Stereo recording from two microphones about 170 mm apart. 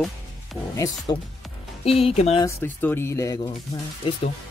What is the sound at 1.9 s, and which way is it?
Speech, 35° left (ahead or behind).